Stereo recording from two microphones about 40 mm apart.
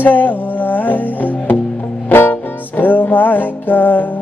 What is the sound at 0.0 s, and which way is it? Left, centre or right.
Music, left.